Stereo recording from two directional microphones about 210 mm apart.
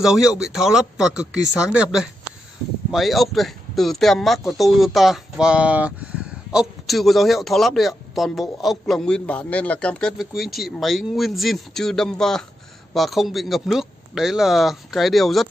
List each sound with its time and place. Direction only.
0.0 s a man's voice: centre (ahead or behind)